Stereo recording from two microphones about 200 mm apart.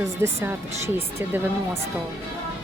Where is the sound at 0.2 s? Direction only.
15° right (ahead or behind).